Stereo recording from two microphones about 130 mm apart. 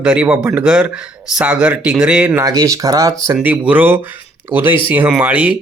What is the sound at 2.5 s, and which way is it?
Speech, 25° right (ahead or behind).